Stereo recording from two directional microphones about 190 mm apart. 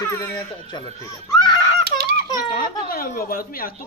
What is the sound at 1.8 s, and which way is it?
Rattle, 55° right (ahead or behind).